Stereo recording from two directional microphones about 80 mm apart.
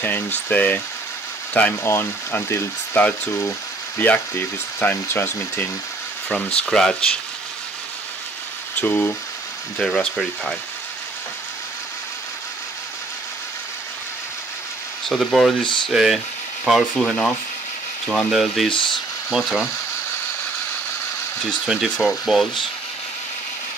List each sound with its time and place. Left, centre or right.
0.0 s speech: left
1.8 s speech: left
6.2 s speech: centre
8.7 s speech: left
9.8 s speech: centre
15.0 s speech: centre
15.6 s speech: left
15.9 s speech: centre
18.7 s speech: left
19.3 s speech: centre
22.2 s speech: centre